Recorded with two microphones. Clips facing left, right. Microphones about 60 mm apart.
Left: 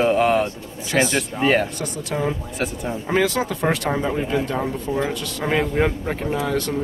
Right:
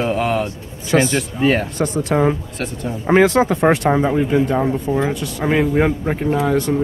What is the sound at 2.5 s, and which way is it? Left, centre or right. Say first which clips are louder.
Speech: even; centre.